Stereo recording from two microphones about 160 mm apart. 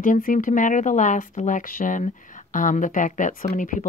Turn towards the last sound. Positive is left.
turn(degrees=55)  # may be behind; listen again after turning